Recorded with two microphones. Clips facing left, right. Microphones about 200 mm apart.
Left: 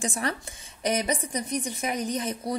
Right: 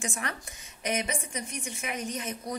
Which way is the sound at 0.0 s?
35° left (ahead or behind).